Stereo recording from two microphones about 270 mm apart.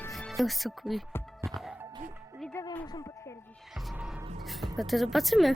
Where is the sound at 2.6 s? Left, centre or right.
Centre.